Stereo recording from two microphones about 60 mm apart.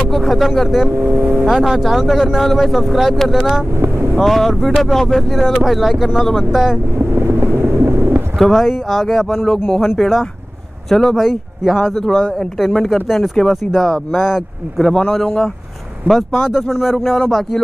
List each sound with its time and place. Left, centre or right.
0.1 s speech: centre
0.9 s speech: right
1.4 s speech: centre
7.0 s vehicle: right
8.4 s a man's voice: centre
14.8 s a man's voice: centre
16.1 s speech: centre